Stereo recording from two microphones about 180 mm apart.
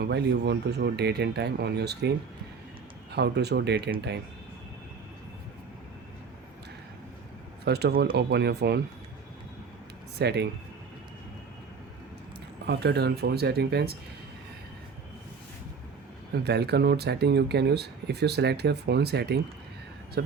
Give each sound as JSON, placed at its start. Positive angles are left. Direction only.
{"t": 0.0, "sound": "speech", "side_deg": -65}
{"t": 7.6, "sound": "speech", "side_deg": -65}
{"t": 10.2, "sound": "speech", "side_deg": -65}
{"t": 12.6, "sound": "speech", "side_deg": -65}
{"t": 16.3, "sound": "speech", "side_deg": -65}